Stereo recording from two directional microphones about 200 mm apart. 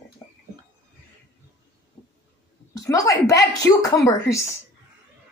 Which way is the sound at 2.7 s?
15° left (ahead or behind).